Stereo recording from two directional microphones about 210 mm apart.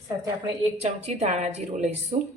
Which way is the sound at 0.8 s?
30° right (ahead or behind).